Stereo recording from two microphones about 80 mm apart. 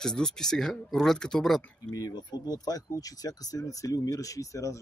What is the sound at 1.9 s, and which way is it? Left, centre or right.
Speech, left.